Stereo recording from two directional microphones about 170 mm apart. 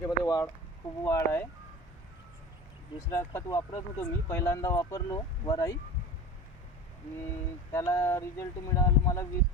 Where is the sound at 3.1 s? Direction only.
15° left (ahead or behind).